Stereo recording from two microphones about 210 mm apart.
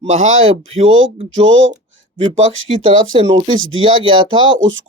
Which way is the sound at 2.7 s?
30° right (ahead or behind).